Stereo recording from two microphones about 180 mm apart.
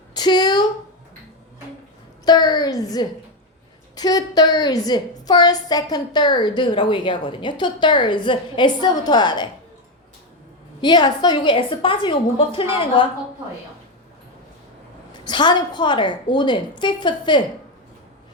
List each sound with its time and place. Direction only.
0.1 s a sound: 25° left (ahead or behind)
2.2 s a woman's voice: 20° left (ahead or behind)
10.8 s a woman's voice: 25° left (ahead or behind)
15.1 s a woman's voice: 25° left (ahead or behind)